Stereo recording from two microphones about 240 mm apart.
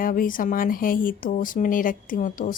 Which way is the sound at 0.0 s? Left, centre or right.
Left.